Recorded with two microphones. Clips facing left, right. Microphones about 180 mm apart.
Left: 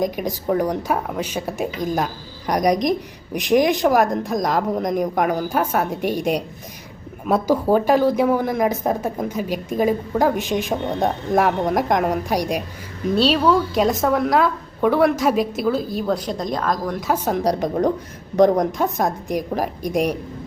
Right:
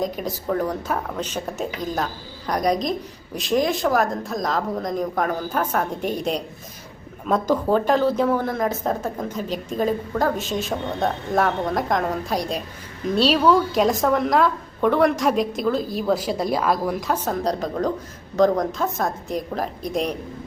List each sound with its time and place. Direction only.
0.0 s a woman's voice: 15° left (ahead or behind)
13.1 s a woman's voice: centre (ahead or behind)
17.1 s a woman's voice: 10° left (ahead or behind)